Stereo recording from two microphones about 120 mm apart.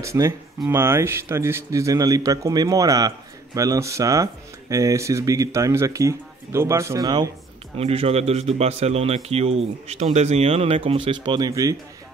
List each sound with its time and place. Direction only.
0.0 s speech: 25° right (ahead or behind)
7.7 s a man's voice: 55° right (ahead or behind); by 11.7 s 30° right (ahead or behind)